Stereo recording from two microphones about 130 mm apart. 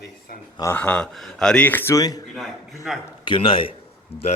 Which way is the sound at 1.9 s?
30° left (ahead or behind).